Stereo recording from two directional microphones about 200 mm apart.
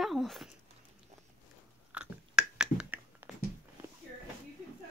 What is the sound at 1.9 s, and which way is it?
Biting, 5° right (ahead or behind).